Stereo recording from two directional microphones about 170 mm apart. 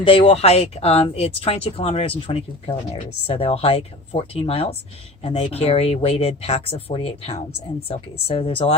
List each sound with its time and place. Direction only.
0.0 s speech: 30° left (ahead or behind)